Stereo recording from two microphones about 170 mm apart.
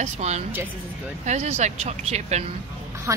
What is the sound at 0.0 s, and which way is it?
Speech, 40° right (ahead or behind).